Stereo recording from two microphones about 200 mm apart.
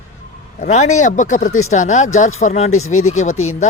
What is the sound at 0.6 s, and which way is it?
Speech, 35° left (ahead or behind).